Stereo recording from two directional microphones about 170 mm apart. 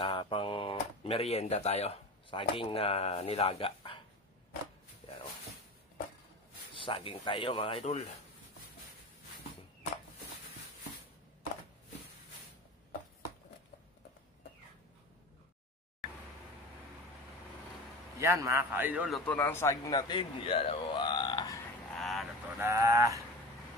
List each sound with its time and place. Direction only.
0.0 s speech: 30° left (ahead or behind)
6.7 s speech: 30° left (ahead or behind)
18.2 s a man's voice: 15° right (ahead or behind)
19.0 s speech: 5° left (ahead or behind)
19.4 s speech: 15° left (ahead or behind)
21.9 s vehicle: centre (ahead or behind)
22.6 s speech: 20° right (ahead or behind)